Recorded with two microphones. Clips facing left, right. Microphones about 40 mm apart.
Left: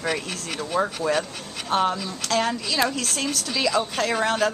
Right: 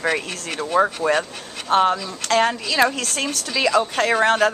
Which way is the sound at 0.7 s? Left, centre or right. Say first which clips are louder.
Right 5 dB; right.